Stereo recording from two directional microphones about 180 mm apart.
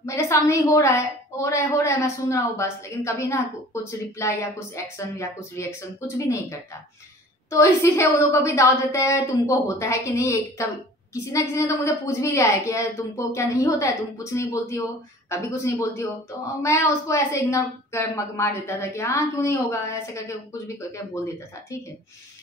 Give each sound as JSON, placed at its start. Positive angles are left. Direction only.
{"t": 0.0, "sound": "a woman's voice", "side_deg": 15}